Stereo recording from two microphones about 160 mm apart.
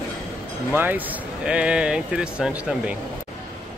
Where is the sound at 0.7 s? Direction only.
10° right (ahead or behind).